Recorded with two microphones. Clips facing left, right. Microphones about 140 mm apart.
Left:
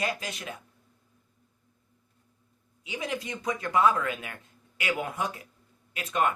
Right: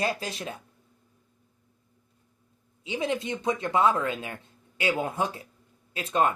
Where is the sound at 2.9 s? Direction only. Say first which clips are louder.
Right 5 dB; 25° right (ahead or behind).